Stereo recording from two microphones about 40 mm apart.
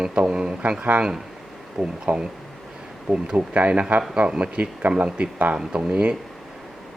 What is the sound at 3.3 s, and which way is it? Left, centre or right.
Speech, right.